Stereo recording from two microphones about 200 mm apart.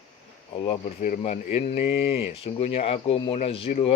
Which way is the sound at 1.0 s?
40° left (ahead or behind).